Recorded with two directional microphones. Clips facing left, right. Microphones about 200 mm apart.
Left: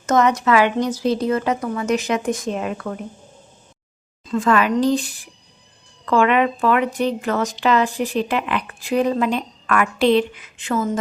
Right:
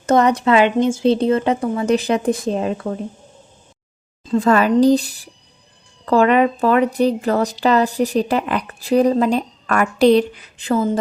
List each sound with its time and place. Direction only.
0.0 s speech: 35° right (ahead or behind)
4.3 s speech: 35° right (ahead or behind)